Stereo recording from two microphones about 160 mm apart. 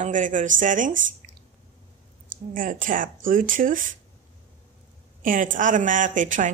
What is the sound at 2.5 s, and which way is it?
Speech, 60° right (ahead or behind).